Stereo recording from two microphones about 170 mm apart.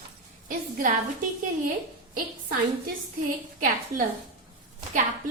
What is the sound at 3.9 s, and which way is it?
Speech, 20° right (ahead or behind).